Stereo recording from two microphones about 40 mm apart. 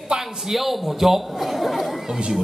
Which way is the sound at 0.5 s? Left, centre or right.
Centre.